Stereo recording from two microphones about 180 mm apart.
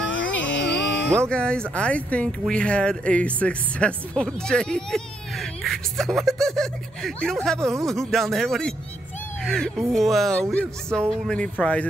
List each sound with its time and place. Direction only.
0.1 s dog: 90° left
1.3 s speech: 5° left (ahead or behind)